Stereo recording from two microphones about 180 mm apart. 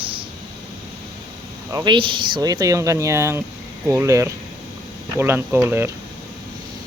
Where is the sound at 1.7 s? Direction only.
25° right (ahead or behind).